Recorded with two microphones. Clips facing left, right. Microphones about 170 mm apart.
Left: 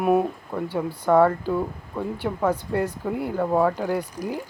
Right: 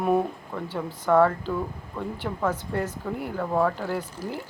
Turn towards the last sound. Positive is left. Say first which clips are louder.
# left 4 dB
turn(degrees=15)  # may be behind; listen again after turning